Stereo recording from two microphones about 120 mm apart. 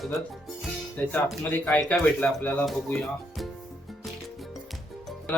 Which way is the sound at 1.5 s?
15° left (ahead or behind).